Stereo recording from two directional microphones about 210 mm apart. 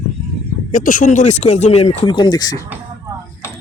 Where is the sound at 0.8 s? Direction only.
40° left (ahead or behind); by 2.6 s 20° left (ahead or behind).